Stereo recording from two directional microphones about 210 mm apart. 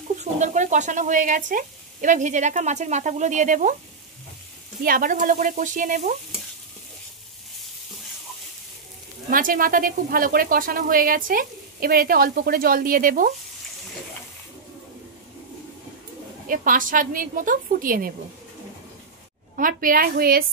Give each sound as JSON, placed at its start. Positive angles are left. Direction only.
{"t": 0.2, "sound": "speech", "side_deg": -35}
{"t": 4.8, "sound": "speech", "side_deg": -40}
{"t": 9.3, "sound": "speech", "side_deg": -40}
{"t": 16.4, "sound": "speech", "side_deg": -40}
{"t": 19.5, "sound": "speech", "side_deg": -40}